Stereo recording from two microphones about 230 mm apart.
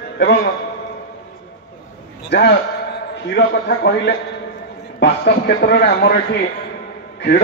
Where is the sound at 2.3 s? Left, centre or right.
Left.